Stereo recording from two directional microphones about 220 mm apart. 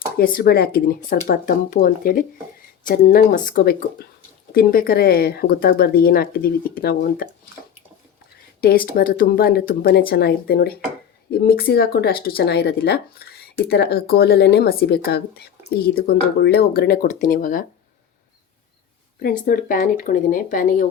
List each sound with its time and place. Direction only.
0.2 s speech: 40° left (ahead or behind)
8.9 s speech: 40° left (ahead or behind)
19.2 s speech: 40° left (ahead or behind)